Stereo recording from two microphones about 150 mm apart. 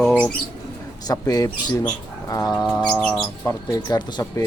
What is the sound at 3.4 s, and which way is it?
Speech, 25° left (ahead or behind).